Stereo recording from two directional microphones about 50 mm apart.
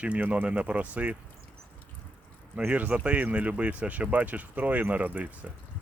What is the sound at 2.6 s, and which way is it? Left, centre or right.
Speech, right.